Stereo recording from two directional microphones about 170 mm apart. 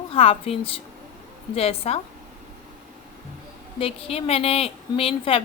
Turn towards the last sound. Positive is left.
turn(degrees=35)  # may be behind; listen again after turning